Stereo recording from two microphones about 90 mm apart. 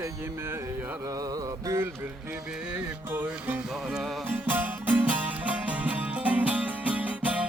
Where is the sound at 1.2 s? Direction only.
45° right (ahead or behind).